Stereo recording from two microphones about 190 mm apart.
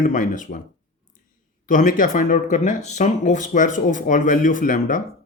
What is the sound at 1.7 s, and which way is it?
Speech, 45° left (ahead or behind).